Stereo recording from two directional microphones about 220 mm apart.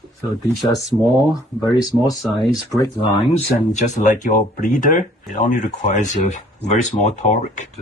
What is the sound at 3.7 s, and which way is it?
Speech, 35° left (ahead or behind).